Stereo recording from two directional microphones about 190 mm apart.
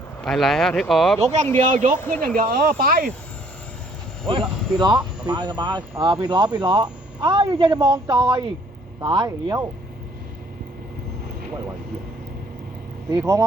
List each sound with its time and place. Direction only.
0.2 s speech: centre (ahead or behind)
1.5 s speech: 40° right (ahead or behind)
2.0 s speech: 10° left (ahead or behind)
2.2 s speech: 50° right (ahead or behind)
4.3 s speech: 25° right (ahead or behind)
13.1 s speech: 15° right (ahead or behind)